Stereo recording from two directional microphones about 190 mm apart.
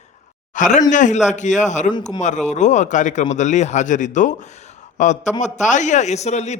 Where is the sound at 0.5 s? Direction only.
40° left (ahead or behind).